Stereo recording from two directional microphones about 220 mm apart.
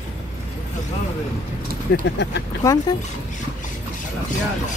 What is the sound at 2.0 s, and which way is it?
Speech, 50° left (ahead or behind).